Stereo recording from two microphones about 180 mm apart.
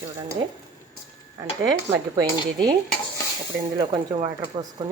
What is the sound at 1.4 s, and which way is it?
Dishes, 20° right (ahead or behind).